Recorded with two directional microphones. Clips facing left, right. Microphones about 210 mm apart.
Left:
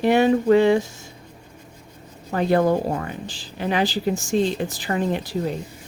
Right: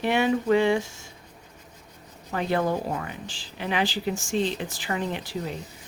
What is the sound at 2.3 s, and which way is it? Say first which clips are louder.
Speech: left 6 dB; 40° left (ahead or behind).